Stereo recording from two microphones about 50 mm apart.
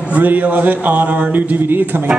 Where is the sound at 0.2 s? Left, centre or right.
Right.